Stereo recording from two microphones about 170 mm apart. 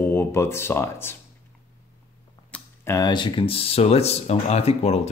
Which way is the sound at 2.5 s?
15° left (ahead or behind).